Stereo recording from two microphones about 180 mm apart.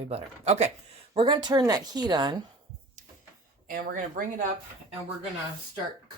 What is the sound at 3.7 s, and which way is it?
Speech, 50° right (ahead or behind).